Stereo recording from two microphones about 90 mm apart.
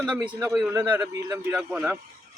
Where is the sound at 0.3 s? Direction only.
30° right (ahead or behind).